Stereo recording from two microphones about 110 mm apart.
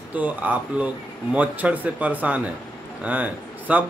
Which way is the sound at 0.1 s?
15° right (ahead or behind).